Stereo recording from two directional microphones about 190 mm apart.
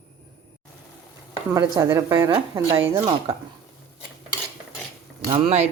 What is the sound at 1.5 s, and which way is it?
A woman's voice, 15° right (ahead or behind).